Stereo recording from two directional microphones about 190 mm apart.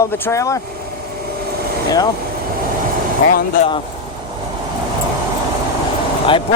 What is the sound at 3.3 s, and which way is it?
Speech, 45° left (ahead or behind).